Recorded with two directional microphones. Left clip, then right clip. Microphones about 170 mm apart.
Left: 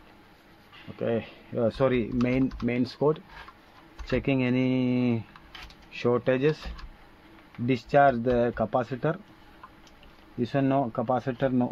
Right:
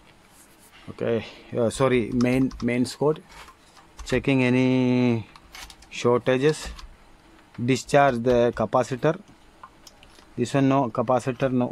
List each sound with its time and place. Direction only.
0.9 s speech: 40° right (ahead or behind)
7.6 s speech: 45° right (ahead or behind)
10.4 s speech: 50° right (ahead or behind)